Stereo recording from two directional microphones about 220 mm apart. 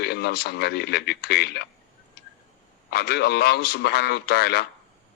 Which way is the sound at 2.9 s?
45° left (ahead or behind).